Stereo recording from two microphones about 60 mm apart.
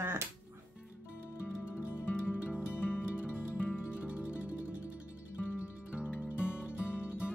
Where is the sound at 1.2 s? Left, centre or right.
Left.